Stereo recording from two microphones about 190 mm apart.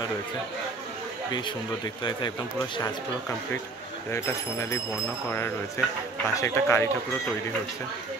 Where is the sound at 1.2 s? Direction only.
20° left (ahead or behind).